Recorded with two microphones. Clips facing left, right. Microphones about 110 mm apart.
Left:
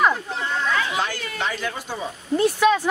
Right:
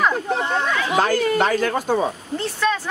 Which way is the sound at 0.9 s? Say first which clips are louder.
Right 9 dB; 45° right (ahead or behind).